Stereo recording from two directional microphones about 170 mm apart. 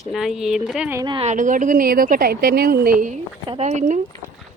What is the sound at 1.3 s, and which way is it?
A woman's voice, 50° right (ahead or behind).